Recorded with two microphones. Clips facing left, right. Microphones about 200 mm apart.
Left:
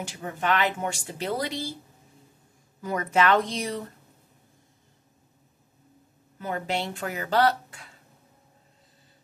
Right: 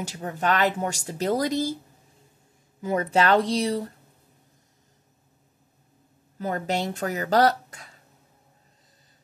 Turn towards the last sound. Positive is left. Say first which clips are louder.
# right 2 dB
turn(degrees=-40)  # may be behind; listen again after turning